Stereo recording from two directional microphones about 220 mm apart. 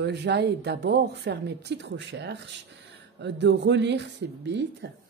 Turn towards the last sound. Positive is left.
turn(degrees=-50)  # may be behind; listen again after turning